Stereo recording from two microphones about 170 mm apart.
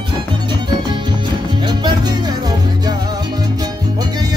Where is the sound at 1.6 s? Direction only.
25° right (ahead or behind).